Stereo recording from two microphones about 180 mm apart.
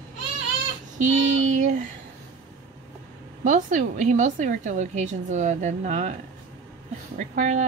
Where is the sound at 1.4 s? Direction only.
40° right (ahead or behind).